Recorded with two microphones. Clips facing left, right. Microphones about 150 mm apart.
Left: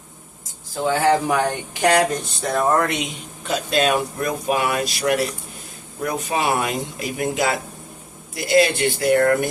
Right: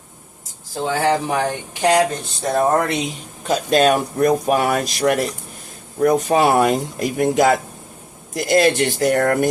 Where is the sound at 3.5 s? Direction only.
45° right (ahead or behind).